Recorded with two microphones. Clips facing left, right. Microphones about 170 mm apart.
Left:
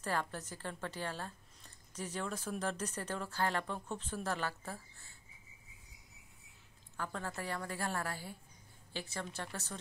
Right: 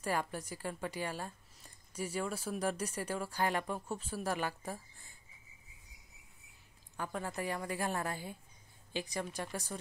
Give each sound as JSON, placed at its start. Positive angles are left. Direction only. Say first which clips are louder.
{"t": 0.0, "sound": "speech", "louder": "right 2 dB", "side_deg": -10}
{"t": 7.0, "sound": "speech", "louder": "right 3 dB", "side_deg": -15}